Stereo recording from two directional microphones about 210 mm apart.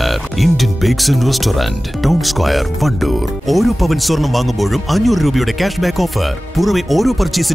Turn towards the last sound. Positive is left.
turn(degrees=0)  # may be behind; listen again after turning